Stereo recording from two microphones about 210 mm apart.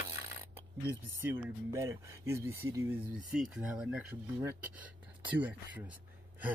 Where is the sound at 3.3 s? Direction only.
5° right (ahead or behind).